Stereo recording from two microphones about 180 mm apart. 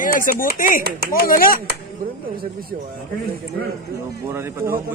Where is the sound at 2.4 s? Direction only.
55° right (ahead or behind).